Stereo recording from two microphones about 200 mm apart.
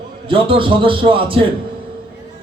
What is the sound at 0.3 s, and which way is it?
A man's voice, 25° right (ahead or behind).